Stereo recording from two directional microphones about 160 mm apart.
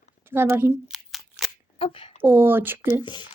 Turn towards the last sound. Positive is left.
turn(degrees=30)  # may be behind; listen again after turning